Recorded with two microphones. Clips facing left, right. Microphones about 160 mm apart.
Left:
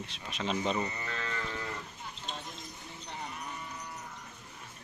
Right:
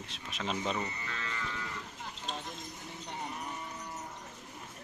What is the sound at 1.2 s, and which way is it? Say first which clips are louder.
Livestock: left 1 dB; 40° left (ahead or behind).